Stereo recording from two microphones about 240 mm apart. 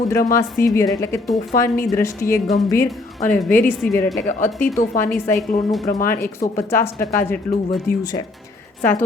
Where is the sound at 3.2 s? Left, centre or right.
Left.